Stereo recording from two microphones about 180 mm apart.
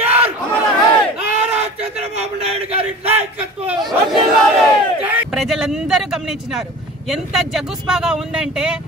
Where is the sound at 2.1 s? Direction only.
35° right (ahead or behind).